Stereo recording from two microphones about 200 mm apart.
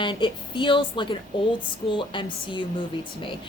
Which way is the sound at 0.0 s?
25° left (ahead or behind).